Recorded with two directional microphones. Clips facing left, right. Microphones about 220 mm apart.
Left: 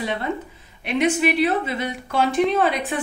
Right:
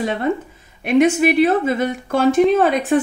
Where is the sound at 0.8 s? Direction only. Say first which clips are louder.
Right 6 dB; 45° right (ahead or behind).